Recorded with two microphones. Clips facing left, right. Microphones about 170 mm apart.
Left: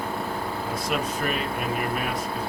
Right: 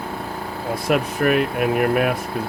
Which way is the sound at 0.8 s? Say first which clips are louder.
Right 10 dB; 65° right (ahead or behind).